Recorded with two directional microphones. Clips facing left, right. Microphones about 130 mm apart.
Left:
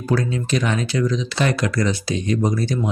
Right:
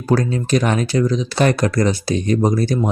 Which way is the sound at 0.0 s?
40° right (ahead or behind).